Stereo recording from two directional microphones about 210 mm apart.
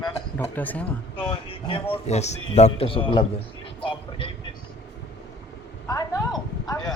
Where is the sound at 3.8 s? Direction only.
25° left (ahead or behind).